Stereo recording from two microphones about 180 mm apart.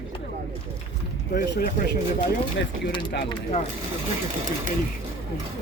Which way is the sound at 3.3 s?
30° left (ahead or behind).